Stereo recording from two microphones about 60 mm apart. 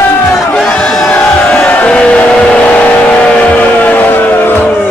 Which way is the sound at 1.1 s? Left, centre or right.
Centre.